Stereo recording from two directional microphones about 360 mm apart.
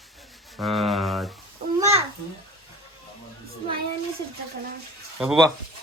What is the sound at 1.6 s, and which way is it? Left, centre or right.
Babbling, centre.